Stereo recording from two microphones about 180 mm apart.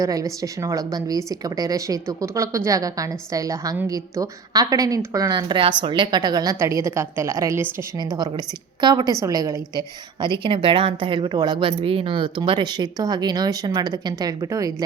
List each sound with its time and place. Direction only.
0.0 s a woman's voice: 20° right (ahead or behind)